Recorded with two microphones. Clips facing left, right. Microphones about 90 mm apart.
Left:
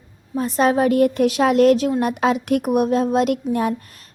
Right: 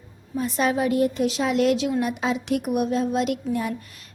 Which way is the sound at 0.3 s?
40° left (ahead or behind).